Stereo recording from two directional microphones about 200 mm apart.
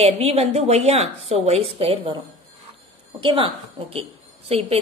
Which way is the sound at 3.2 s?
25° right (ahead or behind).